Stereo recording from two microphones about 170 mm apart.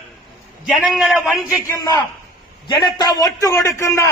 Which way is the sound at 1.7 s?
20° left (ahead or behind).